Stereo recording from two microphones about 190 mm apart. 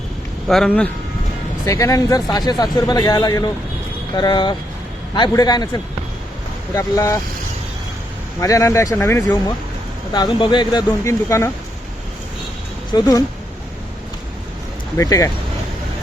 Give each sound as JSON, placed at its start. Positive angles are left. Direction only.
{"t": 0.4, "sound": "speech", "side_deg": 5}
{"t": 1.6, "sound": "a man's voice", "side_deg": 15}
{"t": 8.4, "sound": "a man's voice", "side_deg": 15}
{"t": 12.9, "sound": "a man's voice", "side_deg": 20}
{"t": 14.9, "sound": "speech", "side_deg": 20}